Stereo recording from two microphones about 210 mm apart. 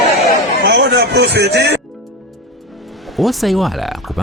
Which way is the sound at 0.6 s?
55° right (ahead or behind).